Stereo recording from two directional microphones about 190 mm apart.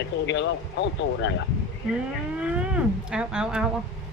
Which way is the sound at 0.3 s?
70° left (ahead or behind).